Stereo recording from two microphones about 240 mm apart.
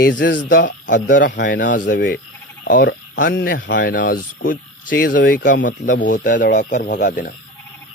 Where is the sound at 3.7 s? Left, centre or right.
Left.